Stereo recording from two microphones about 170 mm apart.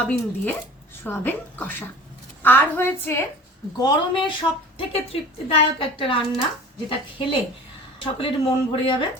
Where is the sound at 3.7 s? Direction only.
25° left (ahead or behind).